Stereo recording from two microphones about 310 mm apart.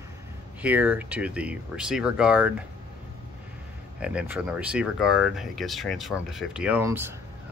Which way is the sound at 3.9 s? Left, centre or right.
Centre.